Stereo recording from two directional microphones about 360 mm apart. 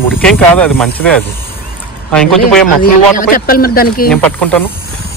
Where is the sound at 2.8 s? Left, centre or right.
Left.